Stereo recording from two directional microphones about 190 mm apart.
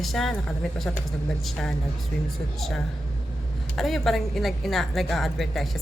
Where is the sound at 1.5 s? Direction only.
Centre (ahead or behind).